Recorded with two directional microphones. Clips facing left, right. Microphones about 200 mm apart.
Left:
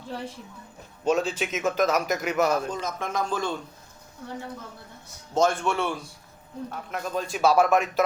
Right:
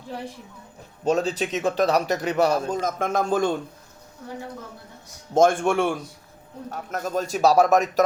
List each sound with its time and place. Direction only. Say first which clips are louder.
1.0 s speech: right 2 dB; 40° right (ahead or behind)
2.8 s speech: right 5 dB; 50° right (ahead or behind)
5.3 s speech: right 5 dB; 50° right (ahead or behind)